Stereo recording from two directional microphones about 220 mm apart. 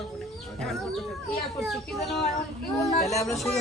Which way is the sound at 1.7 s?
Centre (ahead or behind).